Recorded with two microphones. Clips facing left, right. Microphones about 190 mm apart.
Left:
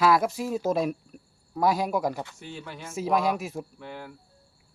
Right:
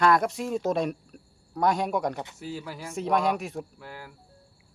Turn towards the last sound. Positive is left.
turn(degrees=-5)  # may be behind; listen again after turning